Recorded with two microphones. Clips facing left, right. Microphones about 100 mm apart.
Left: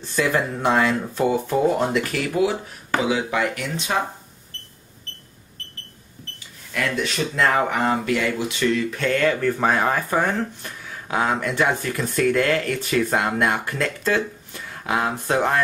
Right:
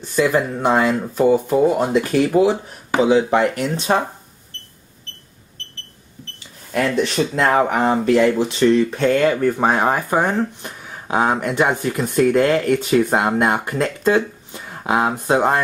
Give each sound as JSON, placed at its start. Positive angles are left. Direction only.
{"t": 0.2, "sound": "speech", "side_deg": -15}
{"t": 6.7, "sound": "speech", "side_deg": -35}